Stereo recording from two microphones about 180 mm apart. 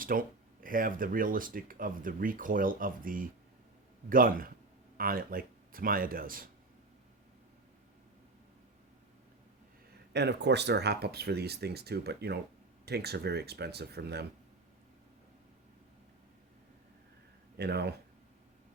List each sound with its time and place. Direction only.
0.0 s speech: 50° right (ahead or behind)
10.1 s speech: 70° right (ahead or behind)
17.6 s speech: 65° right (ahead or behind)